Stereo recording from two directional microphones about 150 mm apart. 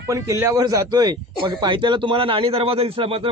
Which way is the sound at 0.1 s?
20° right (ahead or behind).